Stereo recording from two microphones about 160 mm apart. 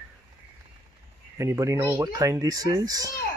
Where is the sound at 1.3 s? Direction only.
15° right (ahead or behind).